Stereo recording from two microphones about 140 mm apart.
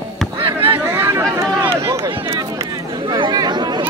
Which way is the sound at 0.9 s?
20° right (ahead or behind).